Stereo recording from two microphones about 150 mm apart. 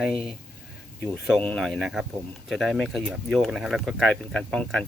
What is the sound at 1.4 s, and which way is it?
Speech, 10° left (ahead or behind).